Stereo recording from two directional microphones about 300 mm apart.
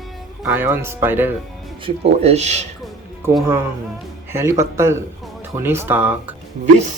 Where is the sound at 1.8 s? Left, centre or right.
Right.